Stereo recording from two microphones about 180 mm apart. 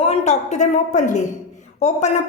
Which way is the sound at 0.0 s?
35° left (ahead or behind).